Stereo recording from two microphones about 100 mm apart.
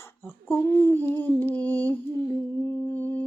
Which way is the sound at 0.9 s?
20° left (ahead or behind).